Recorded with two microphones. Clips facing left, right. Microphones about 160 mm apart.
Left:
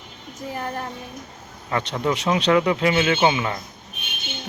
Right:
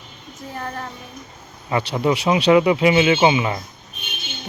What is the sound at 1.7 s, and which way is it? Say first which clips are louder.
Speech: right 4 dB; 10° right (ahead or behind).